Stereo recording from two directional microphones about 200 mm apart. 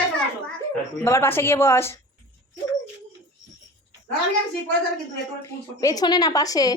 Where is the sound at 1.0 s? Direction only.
10° left (ahead or behind).